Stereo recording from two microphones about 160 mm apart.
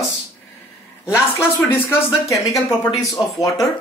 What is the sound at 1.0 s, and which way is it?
Speech, 15° left (ahead or behind).